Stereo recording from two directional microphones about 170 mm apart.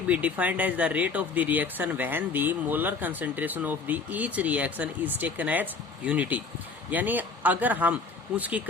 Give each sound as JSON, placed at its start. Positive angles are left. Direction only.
{"t": 0.1, "sound": "speech", "side_deg": -10}